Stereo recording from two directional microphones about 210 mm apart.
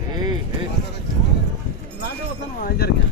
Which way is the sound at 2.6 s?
50° left (ahead or behind).